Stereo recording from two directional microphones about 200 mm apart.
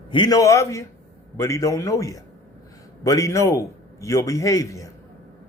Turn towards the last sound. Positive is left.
turn(degrees=15)  # may be behind; listen again after turning